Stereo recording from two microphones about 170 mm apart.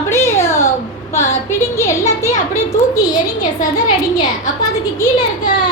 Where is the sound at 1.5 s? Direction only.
15° left (ahead or behind).